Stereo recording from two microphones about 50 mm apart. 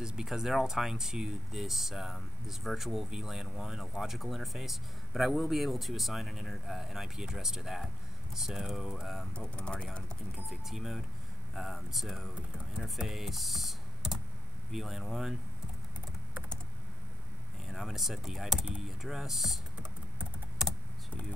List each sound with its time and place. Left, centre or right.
0.0 s speech: centre
9.3 s speech: centre
10.7 s speech: centre
17.6 s speech: centre